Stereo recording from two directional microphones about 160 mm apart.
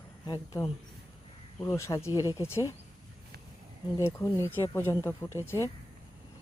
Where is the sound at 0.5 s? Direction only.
20° left (ahead or behind).